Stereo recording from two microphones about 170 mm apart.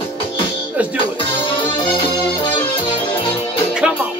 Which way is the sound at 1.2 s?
30° left (ahead or behind).